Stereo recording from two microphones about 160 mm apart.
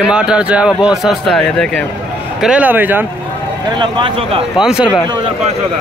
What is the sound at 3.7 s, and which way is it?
Speech, 30° right (ahead or behind).